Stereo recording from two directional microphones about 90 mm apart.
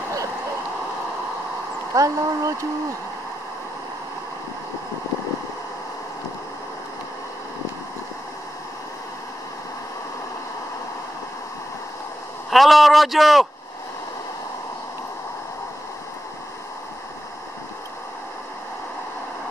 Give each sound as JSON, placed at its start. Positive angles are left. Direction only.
{"t": 2.0, "sound": "speech", "side_deg": -40}
{"t": 12.4, "sound": "speech", "side_deg": 0}